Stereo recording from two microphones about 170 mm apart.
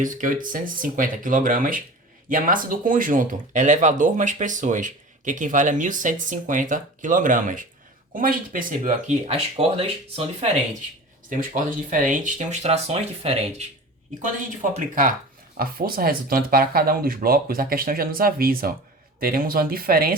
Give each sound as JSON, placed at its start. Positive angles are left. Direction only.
{"t": 0.0, "sound": "speech", "side_deg": -50}
{"t": 9.2, "sound": "speech", "side_deg": -35}
{"t": 11.3, "sound": "speech", "side_deg": -50}
{"t": 14.2, "sound": "speech", "side_deg": -50}